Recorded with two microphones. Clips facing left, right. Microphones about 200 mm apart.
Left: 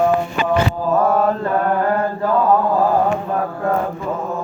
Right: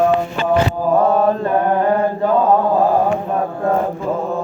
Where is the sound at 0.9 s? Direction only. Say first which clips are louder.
Right 2 dB; 20° right (ahead or behind).